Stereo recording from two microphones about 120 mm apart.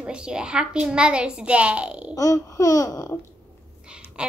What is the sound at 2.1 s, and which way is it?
Babbling, 25° left (ahead or behind).